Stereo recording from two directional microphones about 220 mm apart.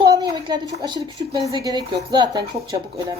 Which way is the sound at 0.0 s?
20° right (ahead or behind).